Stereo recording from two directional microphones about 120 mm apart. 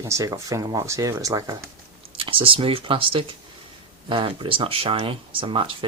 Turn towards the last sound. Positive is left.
turn(degrees=-45)  # may be behind; listen again after turning